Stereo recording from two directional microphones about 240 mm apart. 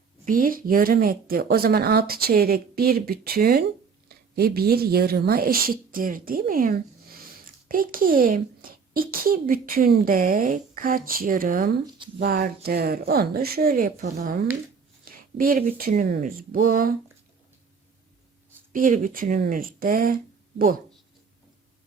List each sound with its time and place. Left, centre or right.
0.3 s speech: right
18.7 s speech: right